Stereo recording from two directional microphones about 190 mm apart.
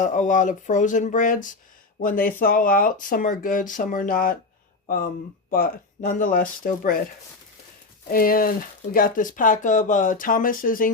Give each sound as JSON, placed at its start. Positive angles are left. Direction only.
{"t": 0.0, "sound": "speech", "side_deg": 40}
{"t": 5.5, "sound": "speech", "side_deg": 50}
{"t": 8.1, "sound": "speech", "side_deg": 50}